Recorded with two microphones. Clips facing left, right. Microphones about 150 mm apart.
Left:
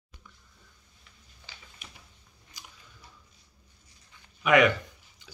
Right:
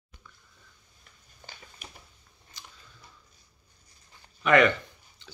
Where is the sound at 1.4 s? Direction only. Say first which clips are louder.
Right 4 dB; 45° right (ahead or behind).